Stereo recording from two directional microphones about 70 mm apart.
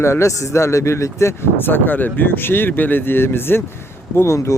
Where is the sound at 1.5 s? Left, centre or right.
Left.